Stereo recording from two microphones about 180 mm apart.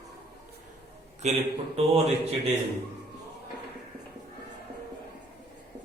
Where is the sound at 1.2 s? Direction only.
35° right (ahead or behind).